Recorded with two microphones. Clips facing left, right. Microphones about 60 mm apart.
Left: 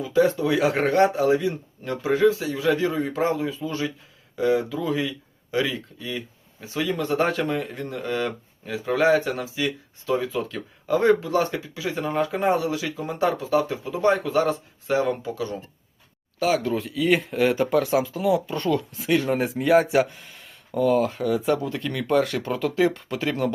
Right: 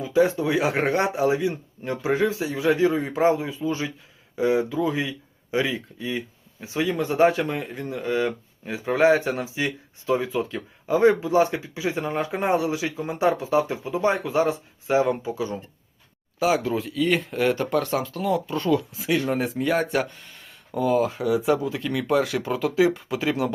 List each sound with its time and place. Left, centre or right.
0.0 s speech: centre
8.6 s speech: right; by 23.6 s centre